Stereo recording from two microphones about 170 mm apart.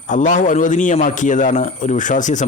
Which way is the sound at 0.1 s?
45° left (ahead or behind).